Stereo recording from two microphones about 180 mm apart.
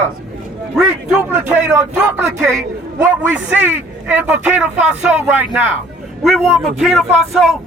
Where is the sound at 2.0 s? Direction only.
5° right (ahead or behind).